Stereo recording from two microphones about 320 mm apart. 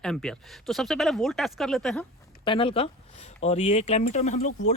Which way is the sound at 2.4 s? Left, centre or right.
Centre.